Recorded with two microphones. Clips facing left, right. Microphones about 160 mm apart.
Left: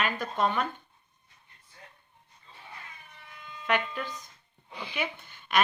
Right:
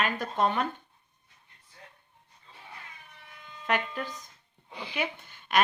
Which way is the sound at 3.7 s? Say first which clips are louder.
Left 1 dB; 40° right (ahead or behind).